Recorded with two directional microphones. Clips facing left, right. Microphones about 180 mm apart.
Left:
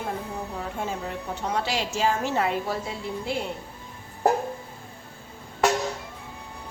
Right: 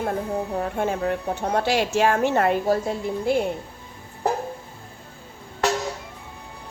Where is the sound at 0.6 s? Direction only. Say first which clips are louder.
Right 6 dB; 60° right (ahead or behind).